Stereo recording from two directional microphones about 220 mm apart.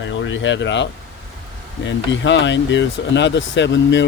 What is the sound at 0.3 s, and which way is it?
Speech, 55° left (ahead or behind).